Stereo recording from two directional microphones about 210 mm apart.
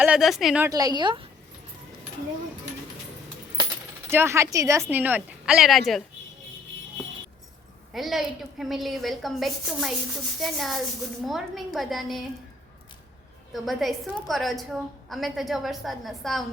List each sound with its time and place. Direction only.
0.0 s a woman's voice: 5° right (ahead or behind)
0.7 s a woman's voice: 15° right (ahead or behind)
4.1 s a woman's voice: 10° right (ahead or behind)
7.9 s a woman's voice: centre (ahead or behind)
13.5 s a woman's voice: centre (ahead or behind)